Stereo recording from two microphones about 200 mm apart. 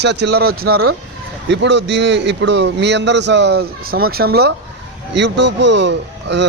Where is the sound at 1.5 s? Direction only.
60° right (ahead or behind).